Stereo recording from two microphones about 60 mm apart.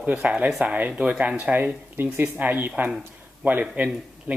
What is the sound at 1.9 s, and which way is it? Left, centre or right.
Speech, right.